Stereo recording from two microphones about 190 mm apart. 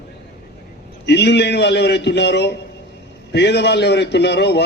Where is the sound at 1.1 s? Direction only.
65° left (ahead or behind).